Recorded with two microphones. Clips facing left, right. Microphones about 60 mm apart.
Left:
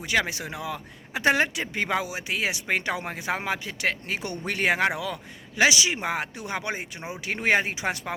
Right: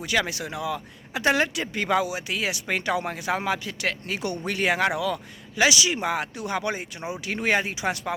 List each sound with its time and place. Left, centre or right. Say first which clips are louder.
0.0 s speech: even; left